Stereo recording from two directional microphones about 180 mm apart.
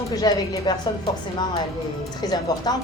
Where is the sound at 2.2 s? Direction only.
20° left (ahead or behind).